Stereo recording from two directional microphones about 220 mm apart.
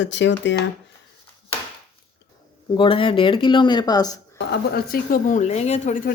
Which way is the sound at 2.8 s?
25° left (ahead or behind).